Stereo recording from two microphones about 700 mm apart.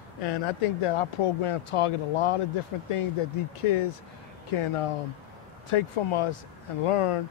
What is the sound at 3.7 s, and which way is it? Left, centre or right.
Speech, left.